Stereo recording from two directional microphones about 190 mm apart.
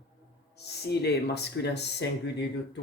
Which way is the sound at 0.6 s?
60° left (ahead or behind).